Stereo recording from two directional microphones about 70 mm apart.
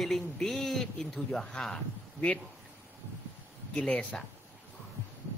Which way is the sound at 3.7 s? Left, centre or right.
Centre.